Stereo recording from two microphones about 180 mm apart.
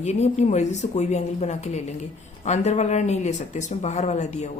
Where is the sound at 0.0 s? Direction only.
40° left (ahead or behind).